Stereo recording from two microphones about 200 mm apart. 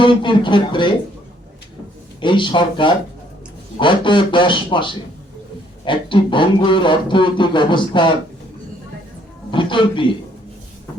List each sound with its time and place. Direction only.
0.0 s speech: 25° left (ahead or behind)
2.2 s speech: 25° left (ahead or behind)
9.5 s a man's voice: 25° left (ahead or behind)